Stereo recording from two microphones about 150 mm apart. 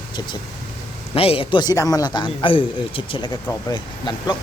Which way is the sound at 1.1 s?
40° left (ahead or behind).